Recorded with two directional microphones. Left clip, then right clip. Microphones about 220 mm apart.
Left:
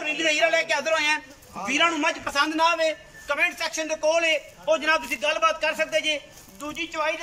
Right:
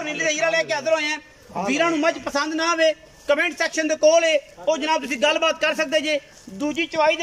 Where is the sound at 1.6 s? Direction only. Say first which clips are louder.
Right 2 dB; 20° right (ahead or behind).